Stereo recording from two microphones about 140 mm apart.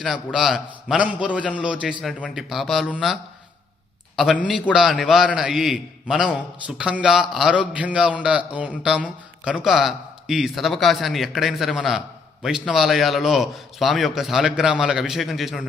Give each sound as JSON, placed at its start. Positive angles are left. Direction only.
{"t": 0.0, "sound": "a man's voice", "side_deg": -5}
{"t": 4.4, "sound": "a man's voice", "side_deg": -5}